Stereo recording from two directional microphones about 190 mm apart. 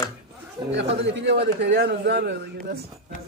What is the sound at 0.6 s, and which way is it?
Speech, 25° right (ahead or behind).